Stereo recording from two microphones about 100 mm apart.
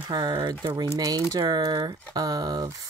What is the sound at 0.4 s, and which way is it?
Speech, 45° right (ahead or behind).